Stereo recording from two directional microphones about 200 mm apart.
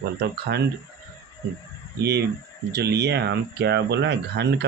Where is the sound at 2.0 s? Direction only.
55° right (ahead or behind).